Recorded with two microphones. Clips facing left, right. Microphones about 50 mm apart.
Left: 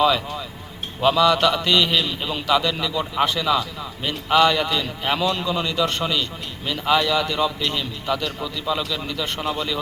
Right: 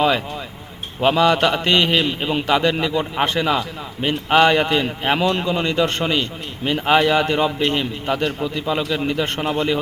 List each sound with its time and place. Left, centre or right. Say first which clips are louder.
1.0 s a man's voice: right 1 dB; right